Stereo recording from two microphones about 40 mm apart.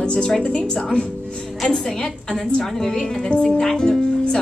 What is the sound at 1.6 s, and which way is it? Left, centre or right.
A woman's voice, centre.